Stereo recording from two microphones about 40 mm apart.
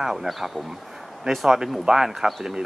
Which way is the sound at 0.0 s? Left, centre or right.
Centre.